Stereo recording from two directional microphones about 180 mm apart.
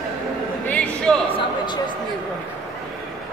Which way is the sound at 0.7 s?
10° left (ahead or behind).